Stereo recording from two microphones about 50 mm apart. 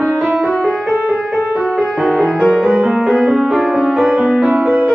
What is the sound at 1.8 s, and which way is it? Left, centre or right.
Music, centre.